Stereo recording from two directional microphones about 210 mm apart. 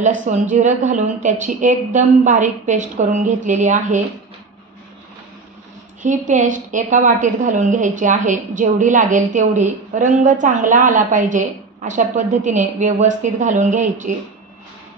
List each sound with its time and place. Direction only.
0.0 s a woman's voice: 35° right (ahead or behind)
6.0 s a woman's voice: 35° right (ahead or behind)